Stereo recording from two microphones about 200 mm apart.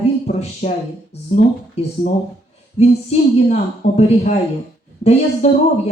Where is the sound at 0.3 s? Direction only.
35° left (ahead or behind).